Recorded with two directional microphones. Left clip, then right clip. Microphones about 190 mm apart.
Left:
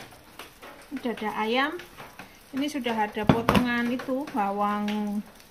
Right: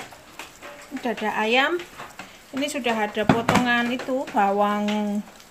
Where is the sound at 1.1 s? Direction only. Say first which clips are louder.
Right 5 dB; 20° right (ahead or behind).